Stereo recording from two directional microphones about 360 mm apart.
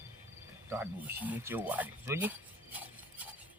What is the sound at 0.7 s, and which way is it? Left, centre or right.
Speech, centre.